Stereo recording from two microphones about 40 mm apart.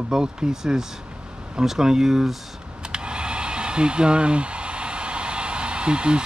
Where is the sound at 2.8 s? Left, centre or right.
Right.